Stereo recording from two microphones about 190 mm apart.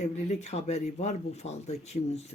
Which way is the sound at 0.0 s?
35° left (ahead or behind).